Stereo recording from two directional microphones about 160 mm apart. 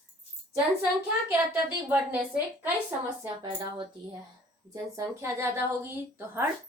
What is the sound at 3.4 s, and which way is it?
Speech, 30° right (ahead or behind).